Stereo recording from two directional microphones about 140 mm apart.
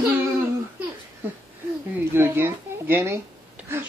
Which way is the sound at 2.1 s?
15° right (ahead or behind).